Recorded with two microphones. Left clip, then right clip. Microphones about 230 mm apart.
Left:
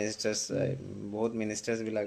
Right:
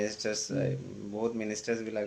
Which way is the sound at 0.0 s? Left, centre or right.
Left.